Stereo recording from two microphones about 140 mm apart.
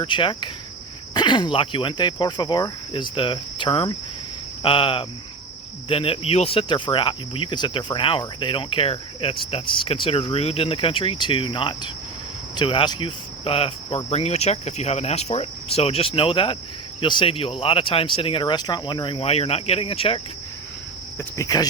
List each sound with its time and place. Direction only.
0.0 s cricket: 35° left (ahead or behind)
21.2 s cricket: 25° left (ahead or behind)